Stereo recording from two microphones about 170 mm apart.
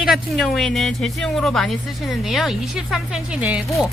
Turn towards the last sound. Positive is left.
turn(degrees=-5)  # may be behind; listen again after turning